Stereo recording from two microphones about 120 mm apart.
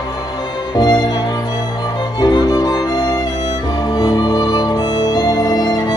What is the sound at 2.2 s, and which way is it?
Music, 35° left (ahead or behind).